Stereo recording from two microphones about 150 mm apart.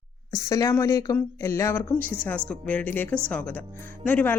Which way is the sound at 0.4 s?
20° left (ahead or behind).